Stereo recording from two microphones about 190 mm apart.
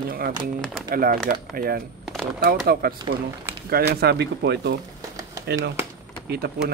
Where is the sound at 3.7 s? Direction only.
55° right (ahead or behind).